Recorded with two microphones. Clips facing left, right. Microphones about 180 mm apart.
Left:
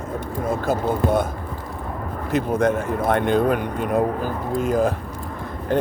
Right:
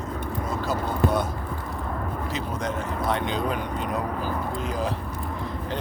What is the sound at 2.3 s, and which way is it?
Speech, 55° left (ahead or behind).